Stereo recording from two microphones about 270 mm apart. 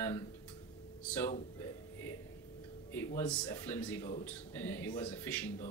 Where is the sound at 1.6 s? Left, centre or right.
Centre.